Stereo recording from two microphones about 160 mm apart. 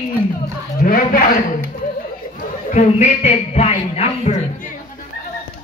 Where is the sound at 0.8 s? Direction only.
60° left (ahead or behind).